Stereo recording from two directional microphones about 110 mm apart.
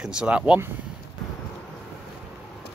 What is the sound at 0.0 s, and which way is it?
Speech, 10° right (ahead or behind).